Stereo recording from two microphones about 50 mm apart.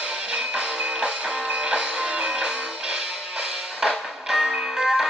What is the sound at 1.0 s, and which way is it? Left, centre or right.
Music, right.